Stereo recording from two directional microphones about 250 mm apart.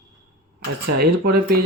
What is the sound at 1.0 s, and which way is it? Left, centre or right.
Speech, right.